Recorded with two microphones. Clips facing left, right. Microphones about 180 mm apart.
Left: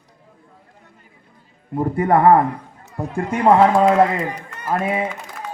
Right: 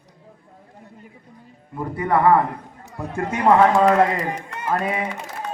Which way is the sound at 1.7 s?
45° left (ahead or behind).